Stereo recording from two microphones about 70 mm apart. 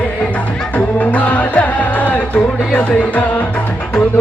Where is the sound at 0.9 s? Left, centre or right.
Left.